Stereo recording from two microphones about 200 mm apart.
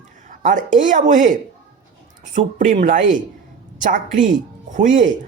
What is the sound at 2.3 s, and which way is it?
A man's voice, 40° right (ahead or behind).